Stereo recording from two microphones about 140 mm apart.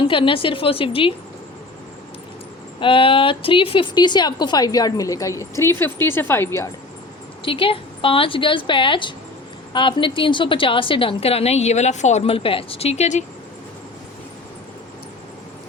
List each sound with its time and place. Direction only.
0.0 s a woman's voice: 35° left (ahead or behind)
2.8 s a woman's voice: 40° left (ahead or behind); by 6.7 s 20° left (ahead or behind)
7.4 s a woman's voice: 40° left (ahead or behind); by 12.2 s 55° left (ahead or behind)
12.2 s speech: 40° left (ahead or behind)